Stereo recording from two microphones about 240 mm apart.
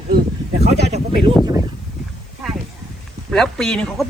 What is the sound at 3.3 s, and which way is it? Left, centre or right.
Speech, centre.